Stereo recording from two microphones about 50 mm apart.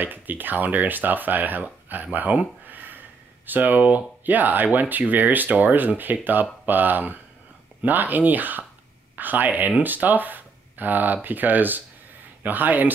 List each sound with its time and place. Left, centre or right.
0.0 s speech: right